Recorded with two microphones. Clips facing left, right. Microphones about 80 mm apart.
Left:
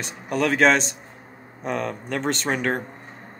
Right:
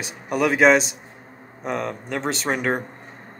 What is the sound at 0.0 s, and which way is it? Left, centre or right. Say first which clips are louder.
Speech: right 2 dB; centre.